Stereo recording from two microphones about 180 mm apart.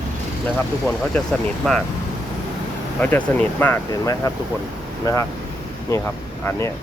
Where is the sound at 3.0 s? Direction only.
10° left (ahead or behind).